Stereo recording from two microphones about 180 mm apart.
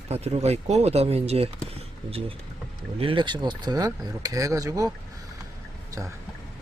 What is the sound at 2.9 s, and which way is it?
Speech, 30° right (ahead or behind).